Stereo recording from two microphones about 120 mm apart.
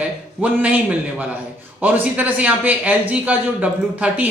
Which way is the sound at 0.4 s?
10° right (ahead or behind).